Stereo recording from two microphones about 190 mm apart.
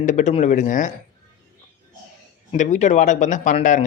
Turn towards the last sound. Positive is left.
turn(degrees=40)  # may be behind; listen again after turning